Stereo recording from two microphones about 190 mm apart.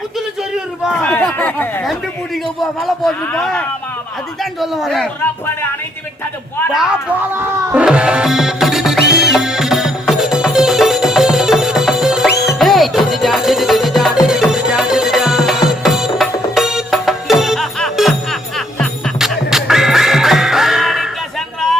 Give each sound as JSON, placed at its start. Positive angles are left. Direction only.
{"t": 0.9, "sound": "a man's voice", "side_deg": 10}
{"t": 4.6, "sound": "a man's voice", "side_deg": 0}
{"t": 6.7, "sound": "a man's voice", "side_deg": 0}
{"t": 7.3, "sound": "music", "side_deg": -10}
{"t": 12.3, "sound": "music", "side_deg": 60}
{"t": 12.5, "sound": "music", "side_deg": 0}